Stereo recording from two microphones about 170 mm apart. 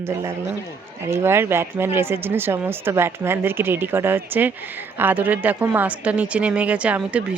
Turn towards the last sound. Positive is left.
turn(degrees=-10)  # may be behind; listen again after turning